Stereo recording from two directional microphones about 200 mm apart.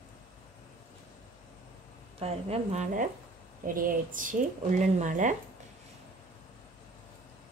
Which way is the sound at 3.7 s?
45° right (ahead or behind).